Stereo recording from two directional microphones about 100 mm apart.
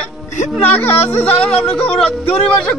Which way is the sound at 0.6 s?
20° left (ahead or behind).